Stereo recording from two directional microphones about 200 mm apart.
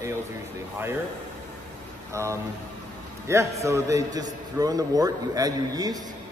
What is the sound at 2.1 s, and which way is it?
A man's voice, 15° right (ahead or behind).